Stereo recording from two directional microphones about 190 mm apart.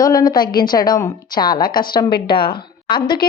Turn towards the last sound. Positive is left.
turn(degrees=25)  # may be behind; listen again after turning